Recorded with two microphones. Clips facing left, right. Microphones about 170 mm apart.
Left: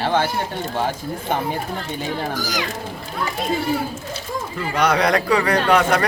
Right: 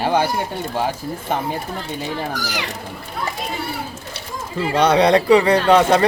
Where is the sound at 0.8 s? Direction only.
5° right (ahead or behind).